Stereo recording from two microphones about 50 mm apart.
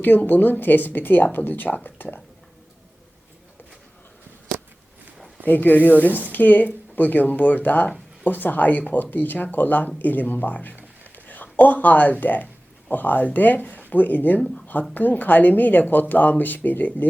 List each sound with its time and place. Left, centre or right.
0.3 s speech: left
5.5 s speech: left
11.1 s a sound: left
12.2 s speech: left